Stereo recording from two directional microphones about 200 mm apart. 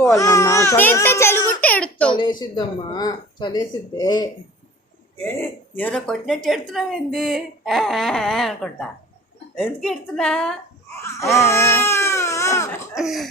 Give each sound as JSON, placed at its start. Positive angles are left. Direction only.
{"t": 0.0, "sound": "a child's voice", "side_deg": 15}
{"t": 2.1, "sound": "speech", "side_deg": 20}
{"t": 5.2, "sound": "speech", "side_deg": 10}
{"t": 11.0, "sound": "speech", "side_deg": 15}
{"t": 11.4, "sound": "baby cry", "side_deg": 15}
{"t": 13.0, "sound": "speech", "side_deg": 0}